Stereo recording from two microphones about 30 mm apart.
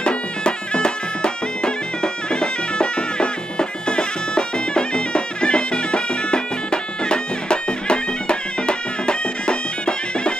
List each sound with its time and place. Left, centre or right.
0.0 s music: left